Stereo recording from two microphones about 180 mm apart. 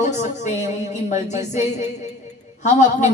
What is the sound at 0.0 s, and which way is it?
Speech, 40° left (ahead or behind).